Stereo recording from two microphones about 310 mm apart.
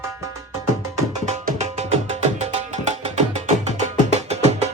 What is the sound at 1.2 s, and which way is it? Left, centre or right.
Music, right.